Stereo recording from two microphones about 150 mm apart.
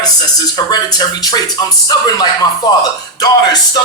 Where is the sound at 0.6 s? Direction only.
30° left (ahead or behind).